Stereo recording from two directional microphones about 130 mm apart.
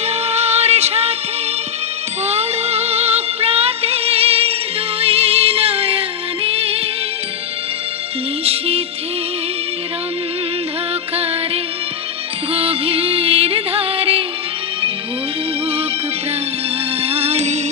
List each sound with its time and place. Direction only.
0.0 s music: 55° right (ahead or behind)
2.2 s music: 55° right (ahead or behind)
8.4 s music: 50° right (ahead or behind)
11.1 s music: 50° right (ahead or behind)
17.0 s music: 50° right (ahead or behind)